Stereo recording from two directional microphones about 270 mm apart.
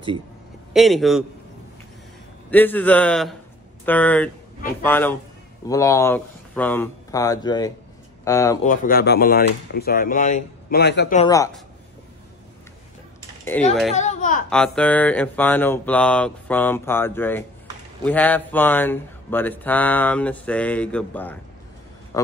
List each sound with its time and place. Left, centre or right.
0.7 s speech: centre
2.5 s speech: centre
8.6 s speech: left
11.1 s speech: centre
13.5 s speech: centre
13.9 s a child's voice: left
14.5 s speech: centre
22.1 s a sound: centre